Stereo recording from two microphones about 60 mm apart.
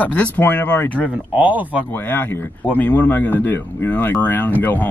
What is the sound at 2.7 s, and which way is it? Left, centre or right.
Speech, left.